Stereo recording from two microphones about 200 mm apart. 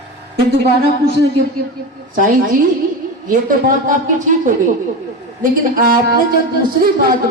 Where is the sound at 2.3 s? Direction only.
40° right (ahead or behind).